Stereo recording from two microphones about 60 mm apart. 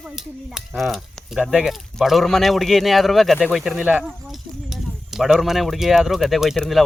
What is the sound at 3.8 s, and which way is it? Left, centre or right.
Speech, centre.